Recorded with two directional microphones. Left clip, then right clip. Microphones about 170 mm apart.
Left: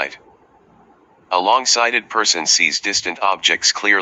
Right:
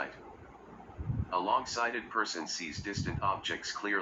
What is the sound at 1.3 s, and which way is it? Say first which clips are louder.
Speech: left 16 dB; 70° left (ahead or behind).